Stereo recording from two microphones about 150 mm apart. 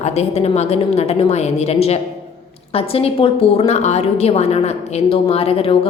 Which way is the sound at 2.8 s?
40° left (ahead or behind).